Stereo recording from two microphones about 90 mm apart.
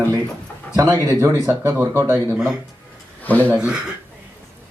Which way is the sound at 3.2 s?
20° left (ahead or behind).